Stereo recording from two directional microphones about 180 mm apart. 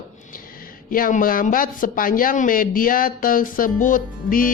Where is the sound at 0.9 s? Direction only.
50° left (ahead or behind).